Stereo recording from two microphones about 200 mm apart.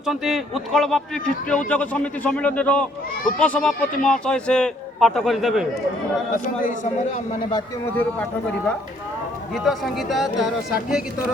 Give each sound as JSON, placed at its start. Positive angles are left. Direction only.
{"t": 0.0, "sound": "a man's voice", "side_deg": 0}
{"t": 6.3, "sound": "a man's voice", "side_deg": 40}
{"t": 7.9, "sound": "a man's voice", "side_deg": 5}